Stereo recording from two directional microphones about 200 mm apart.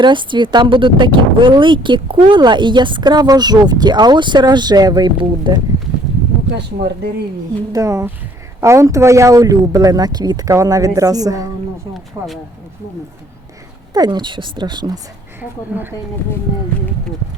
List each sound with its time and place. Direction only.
0.0 s speech: 25° right (ahead or behind)
7.7 s speech: 15° right (ahead or behind)
13.9 s speech: 20° right (ahead or behind)
15.4 s speech: 10° right (ahead or behind)